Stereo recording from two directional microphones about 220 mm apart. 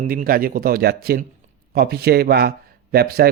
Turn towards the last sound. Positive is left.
turn(degrees=-45)  # may be behind; listen again after turning